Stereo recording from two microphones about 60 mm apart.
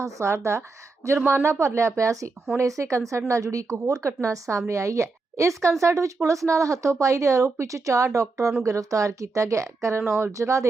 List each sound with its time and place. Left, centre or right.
0.0 s speech: right
10.0 s speech: right
10.3 s speech: right